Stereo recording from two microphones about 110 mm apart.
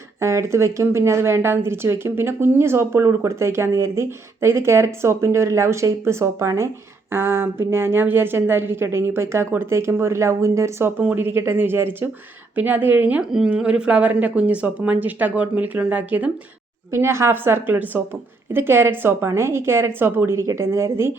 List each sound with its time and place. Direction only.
0.2 s a woman's voice: 25° right (ahead or behind)